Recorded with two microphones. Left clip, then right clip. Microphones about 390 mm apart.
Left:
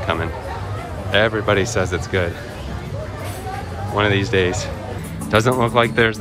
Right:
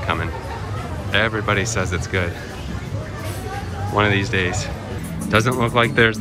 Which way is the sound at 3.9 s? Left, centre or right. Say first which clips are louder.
Left 1 dB; centre.